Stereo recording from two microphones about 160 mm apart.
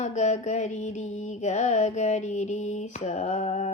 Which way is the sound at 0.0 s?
45° left (ahead or behind).